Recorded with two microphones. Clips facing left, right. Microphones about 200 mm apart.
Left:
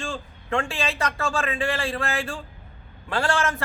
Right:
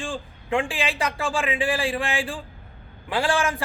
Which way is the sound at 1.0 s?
30° right (ahead or behind).